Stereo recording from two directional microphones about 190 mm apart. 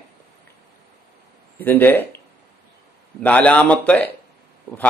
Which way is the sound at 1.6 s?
10° left (ahead or behind).